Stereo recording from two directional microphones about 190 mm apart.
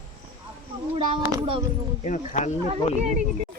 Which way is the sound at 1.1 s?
25° right (ahead or behind).